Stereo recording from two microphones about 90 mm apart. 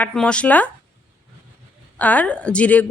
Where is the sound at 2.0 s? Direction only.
15° left (ahead or behind).